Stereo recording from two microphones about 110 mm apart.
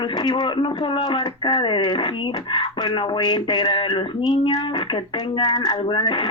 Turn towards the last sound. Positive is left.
turn(degrees=45)  # may be behind; listen again after turning